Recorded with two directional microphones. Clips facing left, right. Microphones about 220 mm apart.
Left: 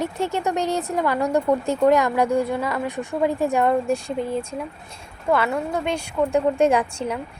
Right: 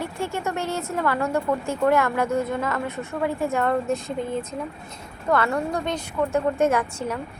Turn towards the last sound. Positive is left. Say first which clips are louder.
# left 3 dB
turn(degrees=15)  # may be behind; listen again after turning